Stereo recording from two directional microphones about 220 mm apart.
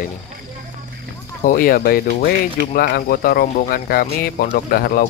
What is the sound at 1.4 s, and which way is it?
Speech, 40° left (ahead or behind).